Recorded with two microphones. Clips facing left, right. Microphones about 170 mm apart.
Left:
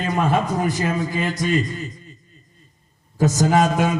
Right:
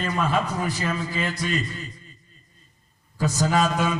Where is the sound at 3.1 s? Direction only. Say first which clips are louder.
Left 5 dB; 45° left (ahead or behind).